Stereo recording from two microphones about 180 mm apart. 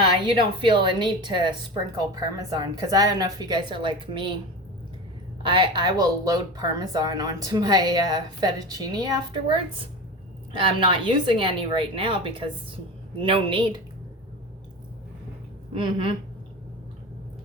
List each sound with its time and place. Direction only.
0.3 s speech: 25° right (ahead or behind)
5.4 s speech: 25° right (ahead or behind)
15.8 s speech: 30° right (ahead or behind)